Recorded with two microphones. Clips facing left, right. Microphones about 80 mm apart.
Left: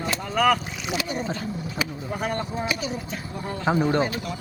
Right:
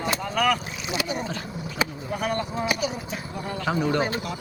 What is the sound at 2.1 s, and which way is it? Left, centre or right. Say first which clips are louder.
Speech: right 1 dB; left.